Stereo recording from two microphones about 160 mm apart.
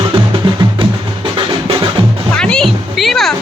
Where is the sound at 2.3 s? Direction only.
5° left (ahead or behind).